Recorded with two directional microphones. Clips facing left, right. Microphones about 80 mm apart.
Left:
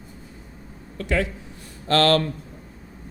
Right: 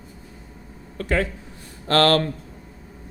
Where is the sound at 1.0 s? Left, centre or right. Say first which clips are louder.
Right 1 dB; right.